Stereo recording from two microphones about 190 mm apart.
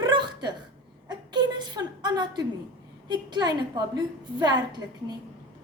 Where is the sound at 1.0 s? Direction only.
25° right (ahead or behind).